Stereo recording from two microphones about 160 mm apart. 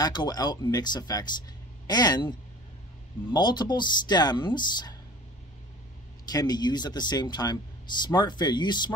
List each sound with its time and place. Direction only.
0.0 s speech: 25° left (ahead or behind)
6.3 s speech: 25° left (ahead or behind)